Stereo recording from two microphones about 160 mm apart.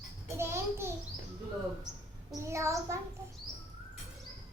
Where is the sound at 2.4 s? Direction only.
20° right (ahead or behind).